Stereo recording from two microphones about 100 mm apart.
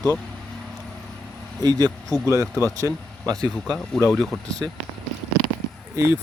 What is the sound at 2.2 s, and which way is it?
Speech, 30° right (ahead or behind).